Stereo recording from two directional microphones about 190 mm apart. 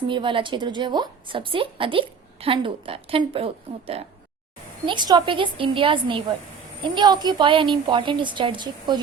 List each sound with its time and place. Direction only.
0.1 s a woman's voice: 25° right (ahead or behind)